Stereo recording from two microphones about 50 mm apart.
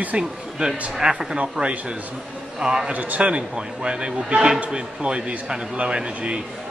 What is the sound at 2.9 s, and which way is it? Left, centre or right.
A man's voice, right.